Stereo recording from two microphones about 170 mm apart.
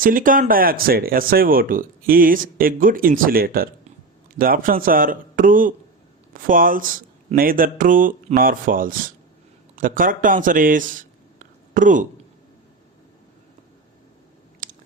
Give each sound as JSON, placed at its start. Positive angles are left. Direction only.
{"t": 0.0, "sound": "a man's voice", "side_deg": -55}
{"t": 14.6, "sound": "chewing", "side_deg": -50}